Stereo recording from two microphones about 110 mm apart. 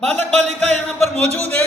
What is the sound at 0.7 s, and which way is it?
Speech, 5° left (ahead or behind).